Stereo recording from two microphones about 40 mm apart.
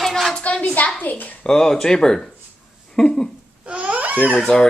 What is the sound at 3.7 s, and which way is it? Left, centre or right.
Babbling, right.